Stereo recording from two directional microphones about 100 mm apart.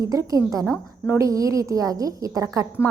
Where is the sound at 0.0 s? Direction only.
35° right (ahead or behind).